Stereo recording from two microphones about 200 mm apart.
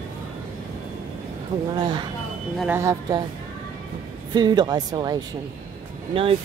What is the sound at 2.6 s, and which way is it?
Speech, 10° right (ahead or behind).